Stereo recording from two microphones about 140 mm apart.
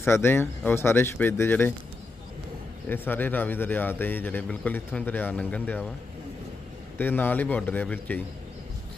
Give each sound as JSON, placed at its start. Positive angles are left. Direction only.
{"t": 0.0, "sound": "a man's voice", "side_deg": 15}
{"t": 2.9, "sound": "a man's voice", "side_deg": 15}
{"t": 7.0, "sound": "a man's voice", "side_deg": 15}